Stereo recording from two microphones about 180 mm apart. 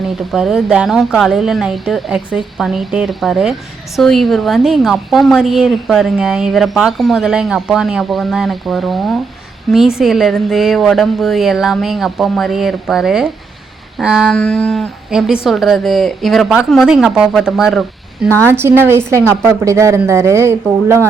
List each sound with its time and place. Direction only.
0.3 s a woman's voice: centre (ahead or behind)
18.3 s a woman's voice: 10° left (ahead or behind)
18.5 s speech: 10° right (ahead or behind)